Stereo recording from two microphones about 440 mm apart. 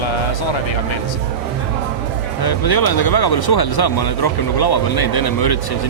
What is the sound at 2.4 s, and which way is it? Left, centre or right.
Speech, left.